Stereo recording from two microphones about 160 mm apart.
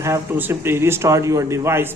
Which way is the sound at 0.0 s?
15° right (ahead or behind).